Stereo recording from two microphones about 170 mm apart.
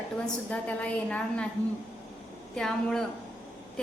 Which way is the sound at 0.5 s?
10° left (ahead or behind).